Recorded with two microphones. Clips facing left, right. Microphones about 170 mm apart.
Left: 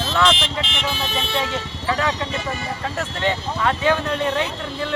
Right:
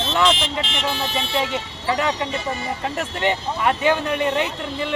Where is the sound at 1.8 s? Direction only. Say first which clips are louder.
Right 1 dB; 15° right (ahead or behind).